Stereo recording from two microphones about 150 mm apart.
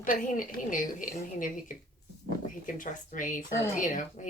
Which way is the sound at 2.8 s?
60° left (ahead or behind).